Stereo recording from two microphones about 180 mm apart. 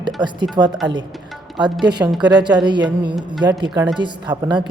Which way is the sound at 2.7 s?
25° right (ahead or behind).